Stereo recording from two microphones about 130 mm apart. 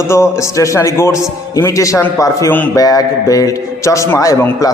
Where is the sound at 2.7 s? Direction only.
30° left (ahead or behind).